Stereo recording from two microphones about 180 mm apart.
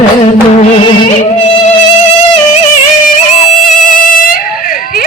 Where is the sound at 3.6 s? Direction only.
45° left (ahead or behind).